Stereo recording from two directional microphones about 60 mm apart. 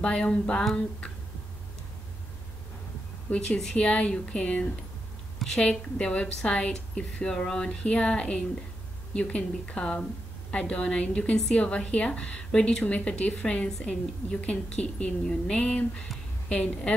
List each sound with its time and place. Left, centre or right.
0.0 s a woman's voice: centre
3.4 s a woman's voice: centre